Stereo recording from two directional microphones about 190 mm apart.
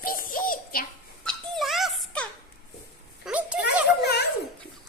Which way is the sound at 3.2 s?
5° right (ahead or behind).